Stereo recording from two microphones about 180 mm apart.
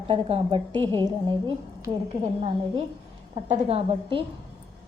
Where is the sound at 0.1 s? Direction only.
30° right (ahead or behind).